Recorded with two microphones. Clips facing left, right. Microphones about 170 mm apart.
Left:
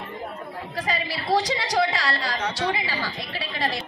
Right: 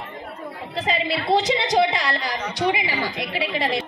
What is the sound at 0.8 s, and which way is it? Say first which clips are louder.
A man's voice: right 5 dB; 20° right (ahead or behind).